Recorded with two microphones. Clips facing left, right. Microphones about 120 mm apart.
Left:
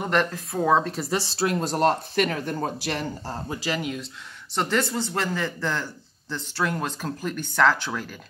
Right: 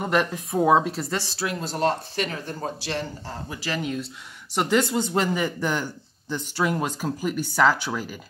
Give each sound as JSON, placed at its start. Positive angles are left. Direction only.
{"t": 0.0, "sound": "speech", "side_deg": -5}
{"t": 1.4, "sound": "speech", "side_deg": 45}
{"t": 3.5, "sound": "speech", "side_deg": 15}
{"t": 3.8, "sound": "speech", "side_deg": 0}
{"t": 4.6, "sound": "speech", "side_deg": -15}